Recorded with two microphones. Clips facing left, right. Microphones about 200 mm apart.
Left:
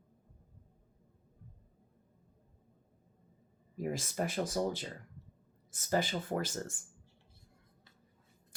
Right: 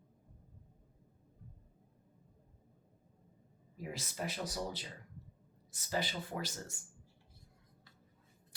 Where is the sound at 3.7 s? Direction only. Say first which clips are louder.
Left 8 dB; 45° left (ahead or behind).